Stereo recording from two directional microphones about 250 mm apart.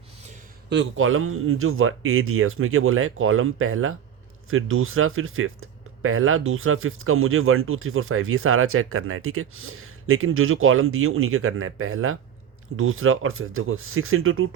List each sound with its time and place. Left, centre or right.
0.7 s speech: right